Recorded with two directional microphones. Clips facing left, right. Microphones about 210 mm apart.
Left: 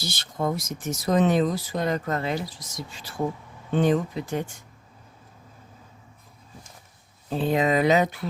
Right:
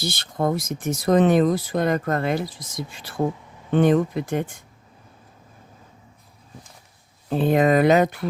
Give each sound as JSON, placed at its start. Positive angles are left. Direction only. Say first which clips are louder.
{"t": 0.0, "sound": "speech", "louder": "right 4 dB", "side_deg": -55}
{"t": 7.3, "sound": "speech", "louder": "right 5 dB", "side_deg": -55}